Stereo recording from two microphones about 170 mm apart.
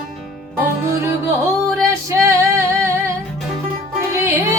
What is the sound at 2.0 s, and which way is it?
Female singing, 20° right (ahead or behind).